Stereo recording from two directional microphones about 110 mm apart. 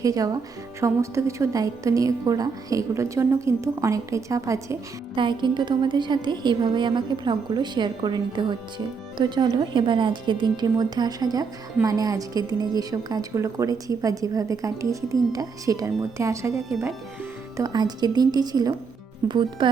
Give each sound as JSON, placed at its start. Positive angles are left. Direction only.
{"t": 0.0, "sound": "a woman's voice", "side_deg": -30}
{"t": 5.1, "sound": "a woman's voice", "side_deg": -45}
{"t": 16.6, "sound": "speech", "side_deg": 0}
{"t": 17.6, "sound": "a woman's voice", "side_deg": -40}